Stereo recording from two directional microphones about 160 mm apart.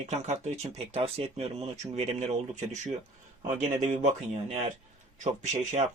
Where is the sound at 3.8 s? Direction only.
45° right (ahead or behind).